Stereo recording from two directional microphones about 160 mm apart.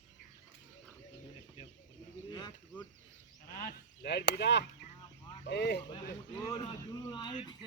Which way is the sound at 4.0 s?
90° left.